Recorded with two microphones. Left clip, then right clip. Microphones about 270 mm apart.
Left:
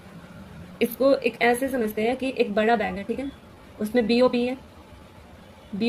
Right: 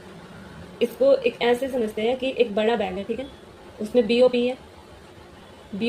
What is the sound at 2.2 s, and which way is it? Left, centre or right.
Speech, left.